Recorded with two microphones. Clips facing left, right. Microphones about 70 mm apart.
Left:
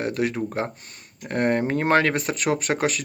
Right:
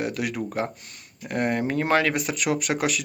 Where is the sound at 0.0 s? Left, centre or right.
Left.